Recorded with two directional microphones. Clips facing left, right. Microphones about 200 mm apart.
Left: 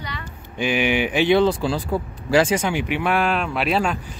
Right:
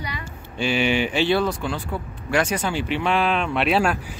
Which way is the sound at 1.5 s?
35° left (ahead or behind).